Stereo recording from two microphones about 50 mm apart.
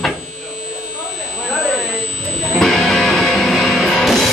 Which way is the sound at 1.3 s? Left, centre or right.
Centre.